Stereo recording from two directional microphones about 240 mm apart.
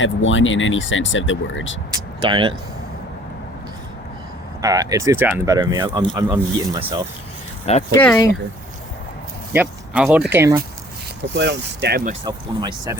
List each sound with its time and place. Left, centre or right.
0.0 s speech: left
2.2 s speech: right
4.6 s speech: centre
7.6 s speech: left
7.9 s speech: centre
9.5 s speech: centre
11.3 s speech: right
12.2 s speech: centre